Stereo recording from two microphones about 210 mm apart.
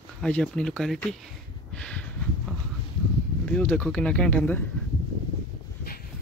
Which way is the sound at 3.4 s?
5° left (ahead or behind).